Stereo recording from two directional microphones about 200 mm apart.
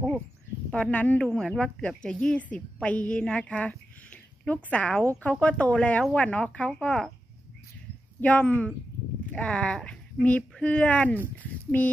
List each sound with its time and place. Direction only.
0.7 s a woman's voice: 5° left (ahead or behind)
8.2 s a woman's voice: 5° left (ahead or behind)